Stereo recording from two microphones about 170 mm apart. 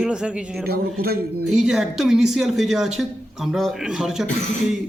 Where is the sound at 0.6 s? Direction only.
65° right (ahead or behind).